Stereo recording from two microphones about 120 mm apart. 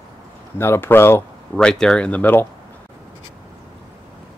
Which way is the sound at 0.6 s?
20° left (ahead or behind).